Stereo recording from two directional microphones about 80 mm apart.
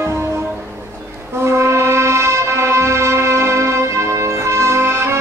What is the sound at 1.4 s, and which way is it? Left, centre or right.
Brass instrument, right.